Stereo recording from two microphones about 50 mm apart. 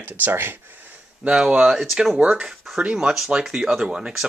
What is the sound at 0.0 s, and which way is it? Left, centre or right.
Speech, right.